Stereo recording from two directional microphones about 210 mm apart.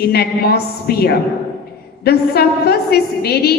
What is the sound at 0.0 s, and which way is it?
A woman's voice, 50° left (ahead or behind).